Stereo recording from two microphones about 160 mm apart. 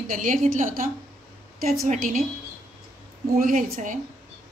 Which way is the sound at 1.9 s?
55° right (ahead or behind).